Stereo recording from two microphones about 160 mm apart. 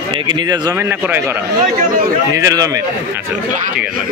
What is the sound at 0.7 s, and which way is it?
Speech, 15° right (ahead or behind).